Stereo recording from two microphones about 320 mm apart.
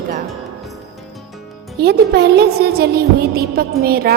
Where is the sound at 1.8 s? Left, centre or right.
Right.